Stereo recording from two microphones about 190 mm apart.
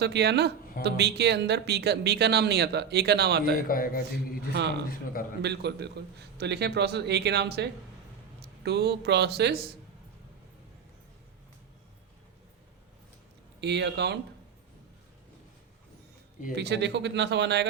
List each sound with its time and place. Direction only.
0.0 s speech: 60° right (ahead or behind)
3.7 s a man's voice: 50° left (ahead or behind)
5.4 s speech: 60° right (ahead or behind)
13.6 s speech: 65° right (ahead or behind)
16.6 s speech: 65° right (ahead or behind)